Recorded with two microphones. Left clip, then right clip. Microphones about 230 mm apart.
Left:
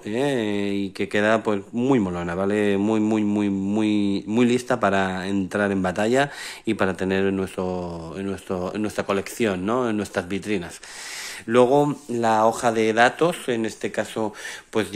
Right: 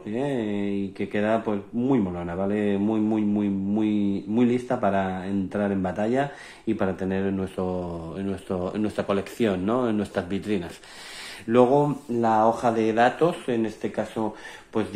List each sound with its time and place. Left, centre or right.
0.1 s speech: left